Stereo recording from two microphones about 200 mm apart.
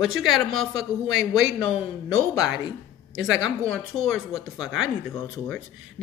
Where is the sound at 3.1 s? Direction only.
80° right.